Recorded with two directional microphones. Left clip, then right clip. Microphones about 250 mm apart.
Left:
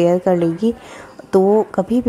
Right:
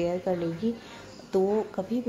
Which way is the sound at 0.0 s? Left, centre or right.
Left.